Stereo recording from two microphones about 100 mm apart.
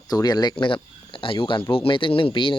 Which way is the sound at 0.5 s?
60° left (ahead or behind).